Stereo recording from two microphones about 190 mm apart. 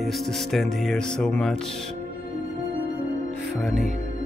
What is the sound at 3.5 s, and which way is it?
Speech, centre (ahead or behind).